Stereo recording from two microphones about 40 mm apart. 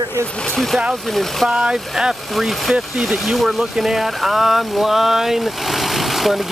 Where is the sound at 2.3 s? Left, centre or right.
Centre.